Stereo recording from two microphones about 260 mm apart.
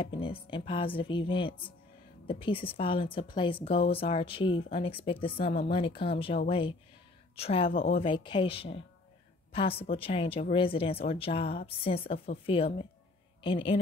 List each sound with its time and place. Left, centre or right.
0.0 s a woman's voice: centre